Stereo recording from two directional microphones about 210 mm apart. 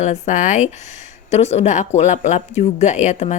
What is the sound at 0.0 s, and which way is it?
Speech, 35° left (ahead or behind).